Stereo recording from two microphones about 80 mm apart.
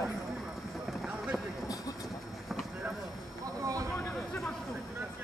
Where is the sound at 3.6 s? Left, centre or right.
Right.